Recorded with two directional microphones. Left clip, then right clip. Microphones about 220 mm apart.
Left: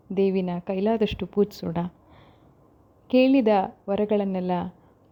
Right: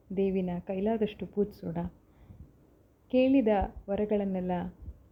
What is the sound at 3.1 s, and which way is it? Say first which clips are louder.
A woman's voice: left 6 dB; 50° left (ahead or behind).